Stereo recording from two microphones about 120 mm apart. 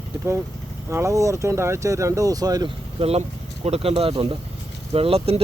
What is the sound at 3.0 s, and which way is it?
Speech, 55° right (ahead or behind).